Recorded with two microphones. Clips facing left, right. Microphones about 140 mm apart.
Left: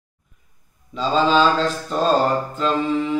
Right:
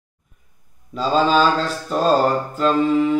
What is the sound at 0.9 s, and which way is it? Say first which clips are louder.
Mantra: right 1 dB; 5° right (ahead or behind).